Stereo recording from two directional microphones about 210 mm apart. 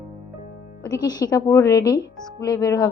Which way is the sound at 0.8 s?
20° left (ahead or behind).